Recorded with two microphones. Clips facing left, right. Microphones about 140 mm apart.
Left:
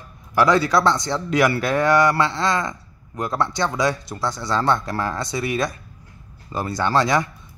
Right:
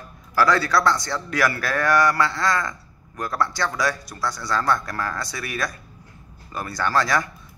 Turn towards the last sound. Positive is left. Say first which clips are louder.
# left 3 dB
turn(degrees=20)  # may be behind; listen again after turning